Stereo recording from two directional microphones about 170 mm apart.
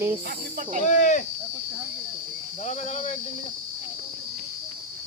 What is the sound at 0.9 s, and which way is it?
Speech, 50° left (ahead or behind).